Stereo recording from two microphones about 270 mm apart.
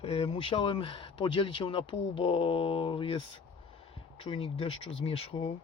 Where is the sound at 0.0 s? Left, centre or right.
Left.